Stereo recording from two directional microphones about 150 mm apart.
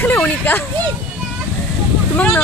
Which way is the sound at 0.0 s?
15° left (ahead or behind).